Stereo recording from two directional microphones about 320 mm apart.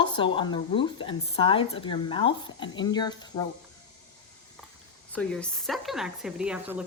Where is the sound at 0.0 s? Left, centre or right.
Centre.